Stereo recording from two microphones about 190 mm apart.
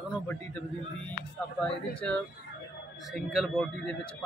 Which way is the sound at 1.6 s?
5° left (ahead or behind).